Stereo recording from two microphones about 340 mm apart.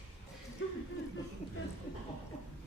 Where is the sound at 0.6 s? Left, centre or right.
Left.